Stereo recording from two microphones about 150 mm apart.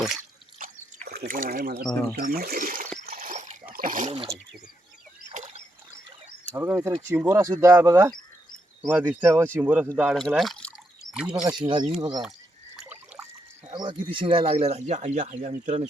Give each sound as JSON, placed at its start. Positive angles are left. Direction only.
{"t": 0.6, "sound": "a sound", "side_deg": -75}
{"t": 2.1, "sound": "speech", "side_deg": -90}
{"t": 3.1, "sound": "splash", "side_deg": -70}
{"t": 3.7, "sound": "a sound", "side_deg": -70}
{"t": 5.3, "sound": "rowboat", "side_deg": -50}
{"t": 6.6, "sound": "speech", "side_deg": -15}
{"t": 10.2, "sound": "speech", "side_deg": 0}
{"t": 11.4, "sound": "speech", "side_deg": -30}
{"t": 12.8, "sound": "a sound", "side_deg": -10}
{"t": 13.7, "sound": "speech", "side_deg": -35}